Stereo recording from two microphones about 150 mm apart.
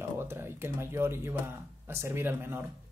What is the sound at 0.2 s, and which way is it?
Speech, 15° right (ahead or behind).